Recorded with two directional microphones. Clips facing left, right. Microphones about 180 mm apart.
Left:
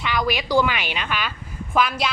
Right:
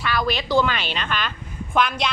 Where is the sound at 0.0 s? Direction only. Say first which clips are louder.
Even; 15° left (ahead or behind).